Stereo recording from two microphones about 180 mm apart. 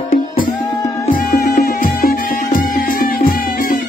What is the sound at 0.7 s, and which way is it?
Music, 20° left (ahead or behind).